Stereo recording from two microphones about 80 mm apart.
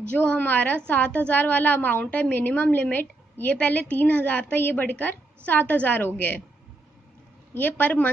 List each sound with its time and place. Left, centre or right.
0.1 s a woman's voice: centre
7.5 s a woman's voice: left